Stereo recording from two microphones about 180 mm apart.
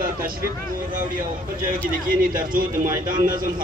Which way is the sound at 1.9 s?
50° right (ahead or behind).